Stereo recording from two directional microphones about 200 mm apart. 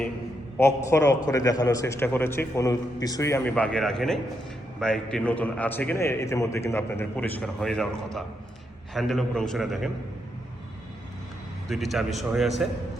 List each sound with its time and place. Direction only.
0.6 s a man's voice: 15° left (ahead or behind)
3.5 s a man's voice: 5° left (ahead or behind)
11.7 s a man's voice: centre (ahead or behind)